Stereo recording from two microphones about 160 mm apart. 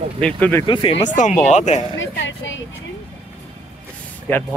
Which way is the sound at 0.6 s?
35° left (ahead or behind).